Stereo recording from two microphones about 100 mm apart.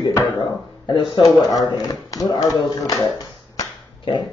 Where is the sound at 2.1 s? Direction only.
35° left (ahead or behind).